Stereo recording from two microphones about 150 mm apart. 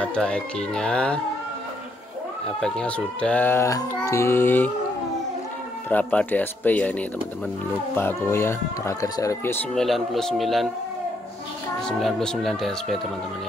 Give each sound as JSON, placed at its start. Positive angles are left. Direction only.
{"t": 0.0, "sound": "speech", "side_deg": 5}
{"t": 2.6, "sound": "speech", "side_deg": 5}
{"t": 5.9, "sound": "speech", "side_deg": 10}
{"t": 9.8, "sound": "speech", "side_deg": 0}
{"t": 12.0, "sound": "speech", "side_deg": 5}